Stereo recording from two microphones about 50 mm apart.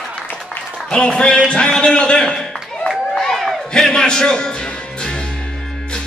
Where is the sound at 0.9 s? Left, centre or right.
Centre.